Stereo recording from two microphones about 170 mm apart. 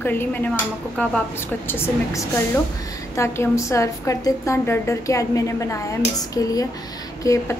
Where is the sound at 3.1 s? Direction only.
15° left (ahead or behind).